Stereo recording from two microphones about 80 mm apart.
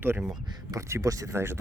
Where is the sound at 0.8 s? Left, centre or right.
Right.